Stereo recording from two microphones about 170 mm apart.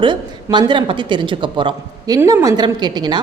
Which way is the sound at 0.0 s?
25° right (ahead or behind).